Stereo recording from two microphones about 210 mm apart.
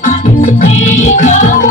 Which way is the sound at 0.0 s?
35° left (ahead or behind).